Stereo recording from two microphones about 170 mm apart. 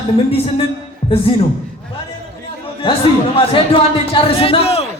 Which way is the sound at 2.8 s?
30° left (ahead or behind).